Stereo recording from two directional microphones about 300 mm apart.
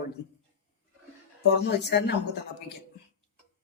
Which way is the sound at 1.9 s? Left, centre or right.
Left.